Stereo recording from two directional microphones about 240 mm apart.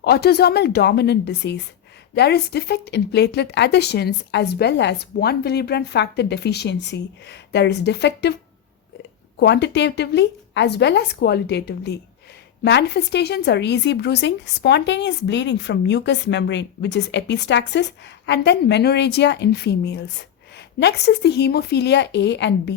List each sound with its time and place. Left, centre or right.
0.0 s a woman's voice: left
9.4 s a woman's voice: left